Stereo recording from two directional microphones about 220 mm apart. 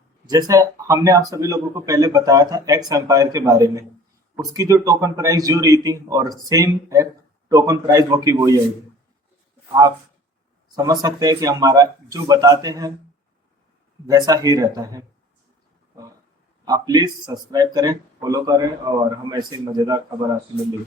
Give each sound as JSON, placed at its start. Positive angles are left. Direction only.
{"t": 0.3, "sound": "a man's voice", "side_deg": -15}
{"t": 10.8, "sound": "a man's voice", "side_deg": -15}
{"t": 14.1, "sound": "a man's voice", "side_deg": -15}
{"t": 16.6, "sound": "a man's voice", "side_deg": -15}